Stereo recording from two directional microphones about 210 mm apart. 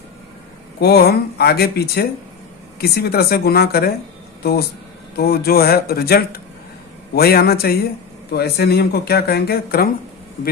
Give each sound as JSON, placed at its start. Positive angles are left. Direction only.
{"t": 0.8, "sound": "speech", "side_deg": 50}
{"t": 5.1, "sound": "speech", "side_deg": 45}